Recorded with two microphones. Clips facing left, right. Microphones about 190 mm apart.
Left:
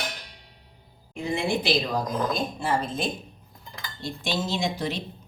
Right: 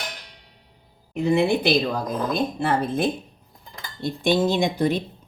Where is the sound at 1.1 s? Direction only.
60° right (ahead or behind).